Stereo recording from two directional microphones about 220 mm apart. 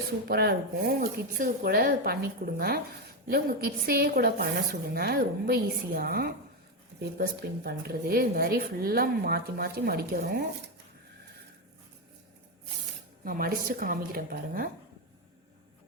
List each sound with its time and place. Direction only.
0.3 s speech: 45° right (ahead or behind)
13.2 s speech: 40° right (ahead or behind)